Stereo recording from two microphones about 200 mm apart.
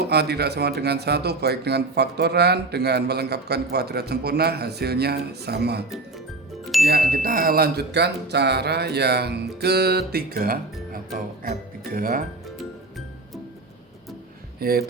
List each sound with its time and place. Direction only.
0.0 s speech: 55° right (ahead or behind)
6.7 s music: centre (ahead or behind)
7.1 s speech: 45° right (ahead or behind)
14.6 s speech: 50° right (ahead or behind)